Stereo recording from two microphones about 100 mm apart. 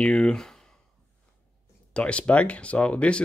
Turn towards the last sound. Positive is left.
turn(degrees=10)  # may be behind; listen again after turning